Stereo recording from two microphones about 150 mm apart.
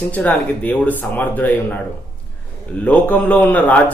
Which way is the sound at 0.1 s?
10° left (ahead or behind).